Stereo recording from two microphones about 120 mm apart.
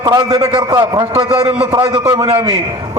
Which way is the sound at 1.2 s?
45° right (ahead or behind).